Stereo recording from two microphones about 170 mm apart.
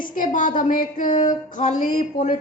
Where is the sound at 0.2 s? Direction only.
50° left (ahead or behind).